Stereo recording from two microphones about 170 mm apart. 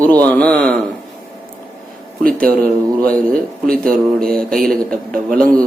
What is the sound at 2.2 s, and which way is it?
Speech, 55° right (ahead or behind).